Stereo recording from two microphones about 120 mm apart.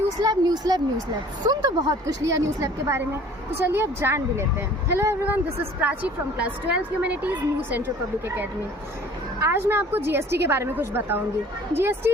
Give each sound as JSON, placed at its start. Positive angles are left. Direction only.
{"t": 0.2, "sound": "a woman's voice", "side_deg": -35}
{"t": 9.4, "sound": "a woman's voice", "side_deg": -20}